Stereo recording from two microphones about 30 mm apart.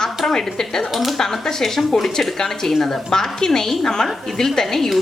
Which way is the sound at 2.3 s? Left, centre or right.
Centre.